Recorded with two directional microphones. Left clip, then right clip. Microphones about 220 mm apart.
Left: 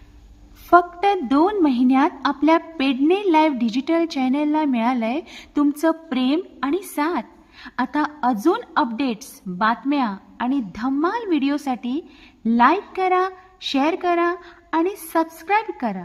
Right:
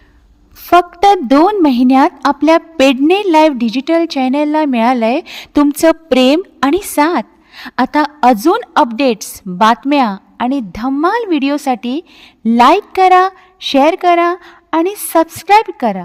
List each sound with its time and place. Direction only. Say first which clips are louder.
0.7 s a woman's voice: right 7 dB; 40° right (ahead or behind)